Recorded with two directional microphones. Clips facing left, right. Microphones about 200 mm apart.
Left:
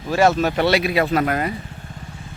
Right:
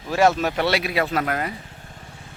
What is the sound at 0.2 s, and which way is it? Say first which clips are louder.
Speech: left 2 dB; 15° right (ahead or behind).